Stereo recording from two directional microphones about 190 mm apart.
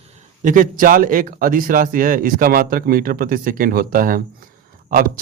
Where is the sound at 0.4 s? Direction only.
45° right (ahead or behind).